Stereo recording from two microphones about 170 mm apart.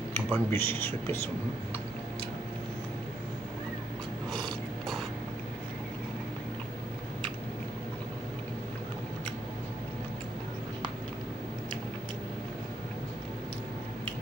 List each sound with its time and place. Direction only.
0.1 s speech: 15° left (ahead or behind)